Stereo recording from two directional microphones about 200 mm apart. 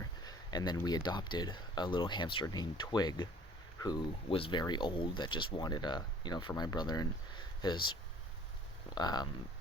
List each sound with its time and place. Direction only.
0.3 s speech: 20° left (ahead or behind)
9.0 s speech: 20° left (ahead or behind)